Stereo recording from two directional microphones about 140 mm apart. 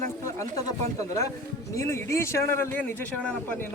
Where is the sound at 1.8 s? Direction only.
20° left (ahead or behind).